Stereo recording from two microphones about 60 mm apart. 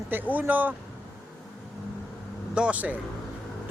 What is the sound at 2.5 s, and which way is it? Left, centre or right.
Speech, right.